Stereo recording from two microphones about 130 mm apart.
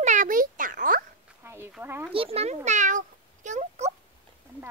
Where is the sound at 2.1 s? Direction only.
45° right (ahead or behind); by 3.9 s 65° right (ahead or behind).